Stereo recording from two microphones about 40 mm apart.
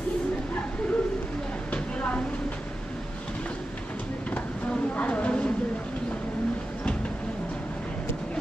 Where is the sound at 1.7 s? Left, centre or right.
Left.